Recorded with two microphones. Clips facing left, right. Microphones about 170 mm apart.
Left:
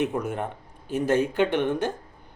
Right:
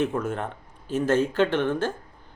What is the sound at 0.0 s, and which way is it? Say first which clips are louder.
Speech: even; 15° left (ahead or behind).